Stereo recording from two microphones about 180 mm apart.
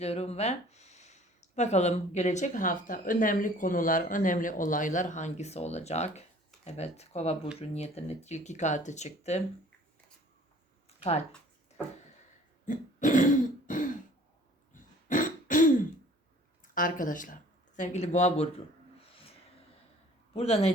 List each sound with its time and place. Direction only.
0.0 s speech: 35° left (ahead or behind)
10.8 s a sound: 35° left (ahead or behind)
12.6 s throat clearing: 45° left (ahead or behind)
16.7 s speech: 50° left (ahead or behind)
20.3 s speech: 35° left (ahead or behind)